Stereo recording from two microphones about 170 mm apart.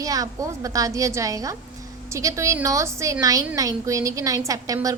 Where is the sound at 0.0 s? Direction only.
20° right (ahead or behind).